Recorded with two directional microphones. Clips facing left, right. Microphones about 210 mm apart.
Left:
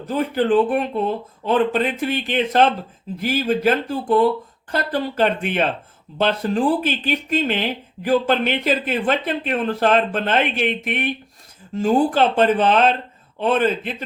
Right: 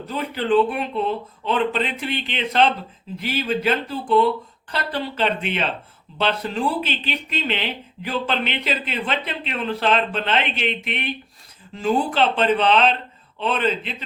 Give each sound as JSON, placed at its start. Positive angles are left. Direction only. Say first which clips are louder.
{"t": 0.0, "sound": "speech", "louder": "left 6 dB", "side_deg": 50}